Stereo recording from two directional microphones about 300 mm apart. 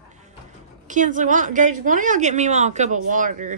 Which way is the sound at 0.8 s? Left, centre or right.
Right.